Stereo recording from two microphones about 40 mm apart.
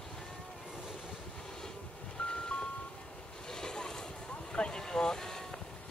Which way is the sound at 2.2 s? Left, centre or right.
Left.